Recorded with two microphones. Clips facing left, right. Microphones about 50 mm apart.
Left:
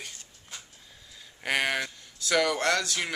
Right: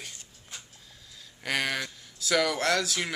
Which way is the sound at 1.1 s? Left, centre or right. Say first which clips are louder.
Left 2 dB; centre.